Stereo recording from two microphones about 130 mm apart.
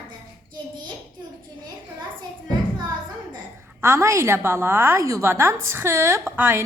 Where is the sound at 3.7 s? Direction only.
20° right (ahead or behind).